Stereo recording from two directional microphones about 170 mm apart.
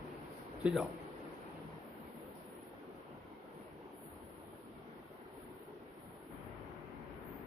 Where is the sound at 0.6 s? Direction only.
5° right (ahead or behind).